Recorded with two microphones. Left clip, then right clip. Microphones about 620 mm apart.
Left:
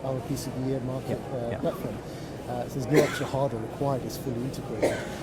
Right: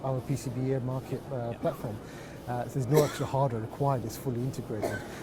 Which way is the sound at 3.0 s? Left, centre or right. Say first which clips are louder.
Left 2 dB; right.